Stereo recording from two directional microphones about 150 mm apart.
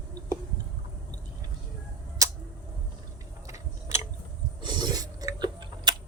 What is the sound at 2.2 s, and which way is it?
Tick, 20° right (ahead or behind).